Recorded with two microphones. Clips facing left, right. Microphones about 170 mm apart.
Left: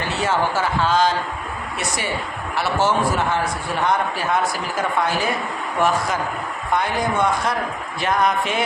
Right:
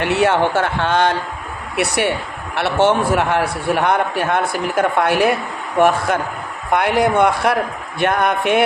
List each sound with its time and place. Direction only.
0.0 s a man's voice: 70° right (ahead or behind)
6.7 s a man's voice: 70° right (ahead or behind)